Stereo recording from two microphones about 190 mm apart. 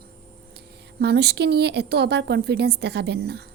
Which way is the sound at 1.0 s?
60° right (ahead or behind).